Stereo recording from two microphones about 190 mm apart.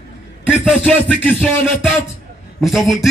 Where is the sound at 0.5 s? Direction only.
5° right (ahead or behind).